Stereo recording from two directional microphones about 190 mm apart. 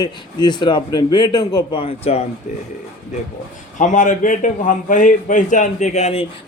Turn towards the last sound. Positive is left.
turn(degrees=35)  # may be behind; listen again after turning